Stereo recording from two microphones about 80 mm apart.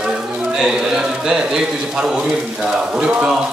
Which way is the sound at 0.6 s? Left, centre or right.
Centre.